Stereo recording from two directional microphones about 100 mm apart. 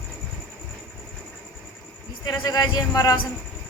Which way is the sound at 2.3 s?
40° left (ahead or behind).